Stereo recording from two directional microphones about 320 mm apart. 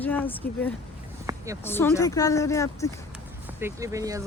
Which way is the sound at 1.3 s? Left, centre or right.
Centre.